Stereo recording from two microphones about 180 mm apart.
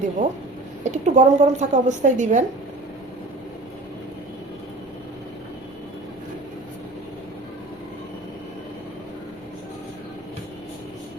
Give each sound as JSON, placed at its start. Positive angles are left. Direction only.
{"t": 0.2, "sound": "speech", "side_deg": -45}